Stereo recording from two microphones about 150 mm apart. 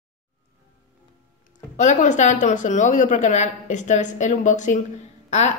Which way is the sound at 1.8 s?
55° left (ahead or behind).